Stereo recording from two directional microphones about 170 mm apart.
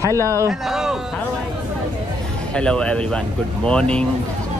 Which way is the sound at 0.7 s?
Centre (ahead or behind).